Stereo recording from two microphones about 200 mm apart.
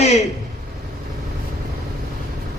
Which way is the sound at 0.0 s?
35° left (ahead or behind).